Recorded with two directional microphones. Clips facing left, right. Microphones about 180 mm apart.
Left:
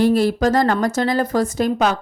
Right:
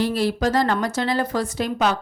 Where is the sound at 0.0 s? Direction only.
50° left (ahead or behind).